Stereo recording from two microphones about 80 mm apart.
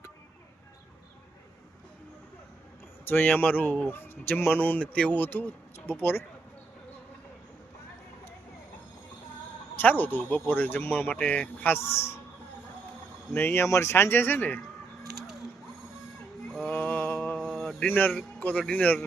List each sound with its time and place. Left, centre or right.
3.1 s speech: left
9.7 s speech: left
13.3 s speech: left
16.6 s mantra: centre
17.8 s a man's voice: left